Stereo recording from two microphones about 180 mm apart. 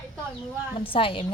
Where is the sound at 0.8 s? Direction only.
30° left (ahead or behind).